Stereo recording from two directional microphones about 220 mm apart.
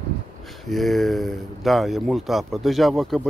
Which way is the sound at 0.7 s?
Centre (ahead or behind).